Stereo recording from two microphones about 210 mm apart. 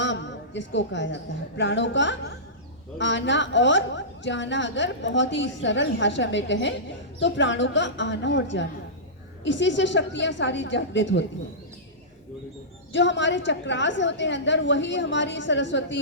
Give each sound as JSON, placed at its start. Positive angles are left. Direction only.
{"t": 0.0, "sound": "a man's voice", "side_deg": 60}
{"t": 12.9, "sound": "a woman's voice", "side_deg": 60}